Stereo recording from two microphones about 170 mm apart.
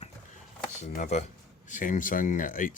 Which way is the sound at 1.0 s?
45° left (ahead or behind).